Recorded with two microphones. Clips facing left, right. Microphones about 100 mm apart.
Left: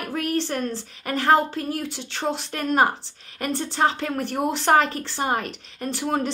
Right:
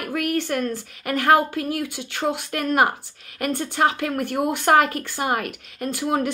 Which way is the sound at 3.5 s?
55° right (ahead or behind).